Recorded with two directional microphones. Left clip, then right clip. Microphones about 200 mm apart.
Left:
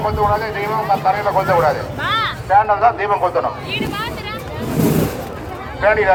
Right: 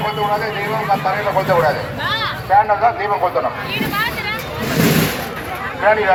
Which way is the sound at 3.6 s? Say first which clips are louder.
Right 3 dB; 35° left (ahead or behind).